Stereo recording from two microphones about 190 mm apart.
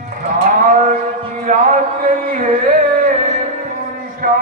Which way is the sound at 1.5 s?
40° right (ahead or behind).